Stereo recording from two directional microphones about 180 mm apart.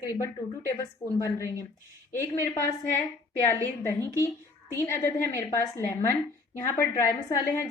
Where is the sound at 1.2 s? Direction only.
15° left (ahead or behind).